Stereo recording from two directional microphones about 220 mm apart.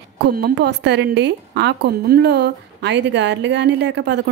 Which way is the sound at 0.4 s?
50° right (ahead or behind).